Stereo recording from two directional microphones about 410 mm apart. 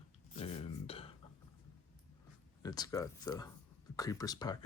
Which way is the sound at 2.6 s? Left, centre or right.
Centre.